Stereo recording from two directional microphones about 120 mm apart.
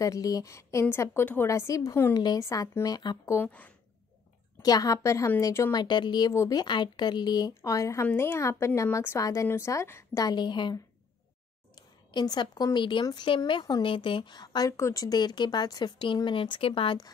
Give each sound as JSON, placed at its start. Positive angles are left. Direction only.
{"t": 0.0, "sound": "speech", "side_deg": 30}
{"t": 2.1, "sound": "speech", "side_deg": 35}
{"t": 3.3, "sound": "a woman's voice", "side_deg": 15}
{"t": 4.6, "sound": "speech", "side_deg": 30}
{"t": 6.3, "sound": "speech", "side_deg": 25}
{"t": 6.6, "sound": "speech", "side_deg": 40}
{"t": 10.2, "sound": "a woman's voice", "side_deg": 40}